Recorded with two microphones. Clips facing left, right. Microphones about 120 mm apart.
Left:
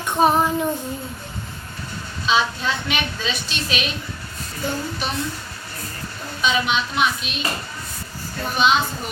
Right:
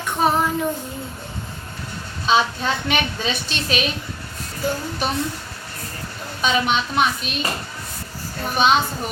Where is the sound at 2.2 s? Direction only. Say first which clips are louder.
Right 2 dB; 45° right (ahead or behind).